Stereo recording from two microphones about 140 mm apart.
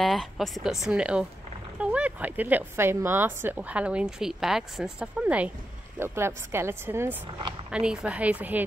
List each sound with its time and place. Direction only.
0.0 s a woman's voice: centre (ahead or behind); by 7.2 s 15° right (ahead or behind)
7.7 s a woman's voice: 5° right (ahead or behind)